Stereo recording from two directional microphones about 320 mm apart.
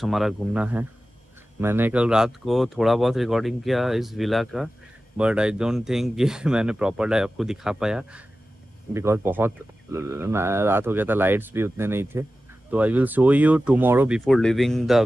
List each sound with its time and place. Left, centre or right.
0.0 s speech: centre